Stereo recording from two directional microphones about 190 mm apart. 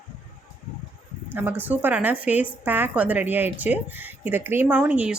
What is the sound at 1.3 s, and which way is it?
A woman's voice, 10° right (ahead or behind).